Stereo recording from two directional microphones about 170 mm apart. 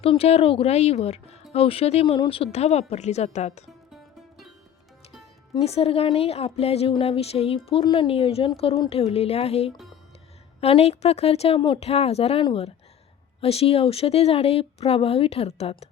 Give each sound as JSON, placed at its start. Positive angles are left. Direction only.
{"t": 0.0, "sound": "a woman's voice", "side_deg": 35}
{"t": 5.5, "sound": "a woman's voice", "side_deg": 35}